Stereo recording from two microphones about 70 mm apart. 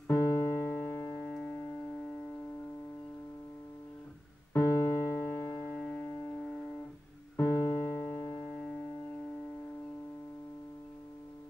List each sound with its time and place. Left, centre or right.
0.1 s music: left
0.9 s music: left
4.6 s music: left
5.7 s music: centre
7.3 s music: left
8.4 s music: centre